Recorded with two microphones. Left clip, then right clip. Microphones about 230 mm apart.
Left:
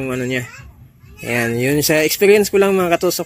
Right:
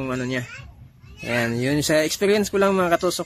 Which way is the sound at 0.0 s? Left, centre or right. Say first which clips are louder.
Left 5 dB; centre.